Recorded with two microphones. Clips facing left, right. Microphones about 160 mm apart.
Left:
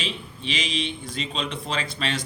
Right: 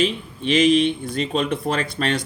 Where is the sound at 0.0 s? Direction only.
55° right (ahead or behind).